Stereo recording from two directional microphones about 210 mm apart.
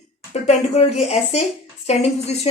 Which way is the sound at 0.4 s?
30° left (ahead or behind).